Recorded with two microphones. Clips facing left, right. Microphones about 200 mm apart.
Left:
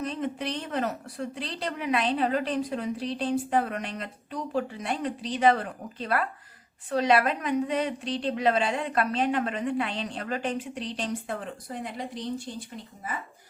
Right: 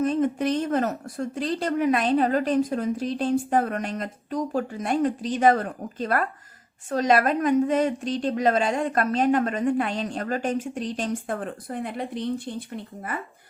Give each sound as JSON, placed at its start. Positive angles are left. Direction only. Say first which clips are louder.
{"t": 0.0, "sound": "a woman's voice", "louder": "right 8 dB", "side_deg": -45}